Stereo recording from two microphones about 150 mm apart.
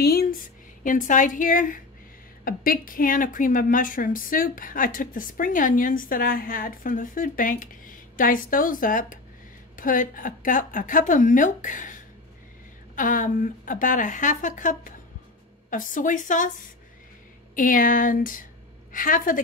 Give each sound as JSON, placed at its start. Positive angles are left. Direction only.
{"t": 0.0, "sound": "a sound", "side_deg": 90}
{"t": 0.8, "sound": "a woman's voice", "side_deg": 60}
{"t": 17.6, "sound": "a woman's voice", "side_deg": 65}